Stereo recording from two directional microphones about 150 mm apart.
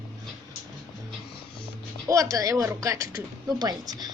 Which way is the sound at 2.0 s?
20° right (ahead or behind).